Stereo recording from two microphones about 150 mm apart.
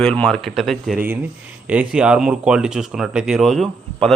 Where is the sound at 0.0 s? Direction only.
5° left (ahead or behind).